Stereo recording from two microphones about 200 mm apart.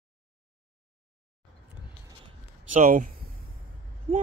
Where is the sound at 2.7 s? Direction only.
40° right (ahead or behind).